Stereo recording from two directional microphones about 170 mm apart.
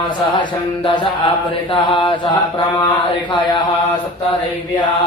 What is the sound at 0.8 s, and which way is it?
Mantra, 30° left (ahead or behind).